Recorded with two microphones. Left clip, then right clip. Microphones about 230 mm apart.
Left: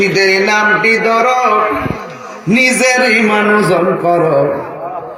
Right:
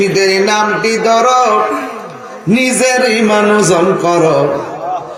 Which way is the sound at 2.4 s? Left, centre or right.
Right.